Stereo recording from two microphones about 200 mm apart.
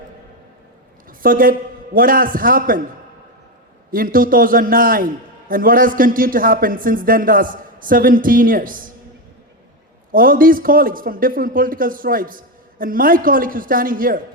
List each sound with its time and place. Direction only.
1.2 s a man's voice: 45° right (ahead or behind)
3.9 s a man's voice: 45° right (ahead or behind)
10.1 s a man's voice: 45° right (ahead or behind)